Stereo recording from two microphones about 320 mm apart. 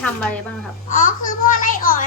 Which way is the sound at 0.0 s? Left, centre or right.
Centre.